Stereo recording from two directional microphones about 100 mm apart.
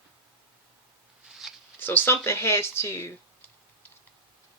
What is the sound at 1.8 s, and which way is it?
Speech, 20° left (ahead or behind).